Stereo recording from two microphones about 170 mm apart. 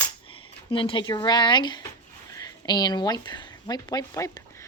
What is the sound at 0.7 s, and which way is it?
Speech, 30° left (ahead or behind).